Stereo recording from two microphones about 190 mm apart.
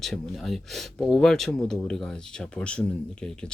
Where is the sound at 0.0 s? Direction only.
Centre (ahead or behind).